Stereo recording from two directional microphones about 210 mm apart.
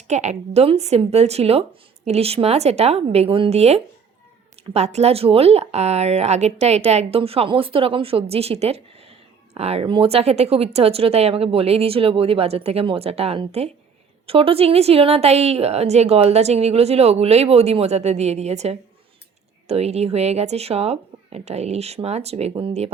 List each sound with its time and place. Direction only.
0.1 s a woman's voice: 35° right (ahead or behind)